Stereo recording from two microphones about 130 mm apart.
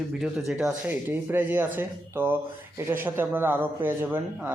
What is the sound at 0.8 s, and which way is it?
Speech, 15° right (ahead or behind).